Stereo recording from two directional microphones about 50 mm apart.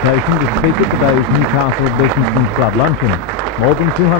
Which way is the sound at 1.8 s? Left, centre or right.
Right.